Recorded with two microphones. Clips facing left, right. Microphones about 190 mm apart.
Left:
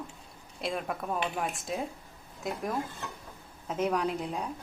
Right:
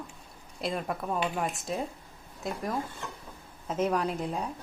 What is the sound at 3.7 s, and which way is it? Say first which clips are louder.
Speech: right 1 dB; centre (ahead or behind).